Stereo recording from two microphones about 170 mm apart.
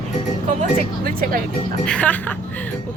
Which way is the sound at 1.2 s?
55° right (ahead or behind).